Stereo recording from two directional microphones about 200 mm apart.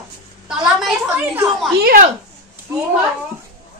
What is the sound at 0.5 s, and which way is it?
A woman's voice, 5° right (ahead or behind).